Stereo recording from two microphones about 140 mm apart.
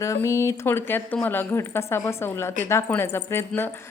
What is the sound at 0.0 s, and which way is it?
Speech, 20° left (ahead or behind).